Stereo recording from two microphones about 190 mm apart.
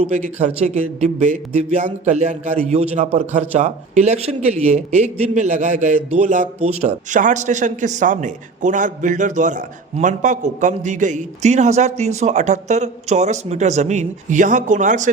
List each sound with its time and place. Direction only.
0.0 s a man's voice: 35° right (ahead or behind)